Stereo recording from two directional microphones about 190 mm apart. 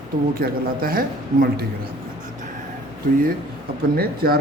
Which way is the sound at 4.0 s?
55° right (ahead or behind).